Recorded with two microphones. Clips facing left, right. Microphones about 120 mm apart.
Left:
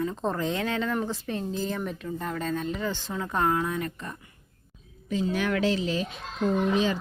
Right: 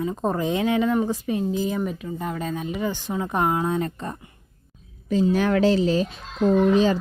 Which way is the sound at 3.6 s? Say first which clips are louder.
Right 5 dB; 30° right (ahead or behind).